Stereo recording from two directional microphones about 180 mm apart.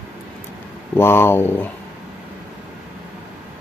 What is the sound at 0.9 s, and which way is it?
Speech, 15° left (ahead or behind).